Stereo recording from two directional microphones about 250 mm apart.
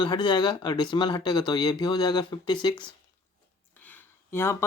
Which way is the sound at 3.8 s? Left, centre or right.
Centre.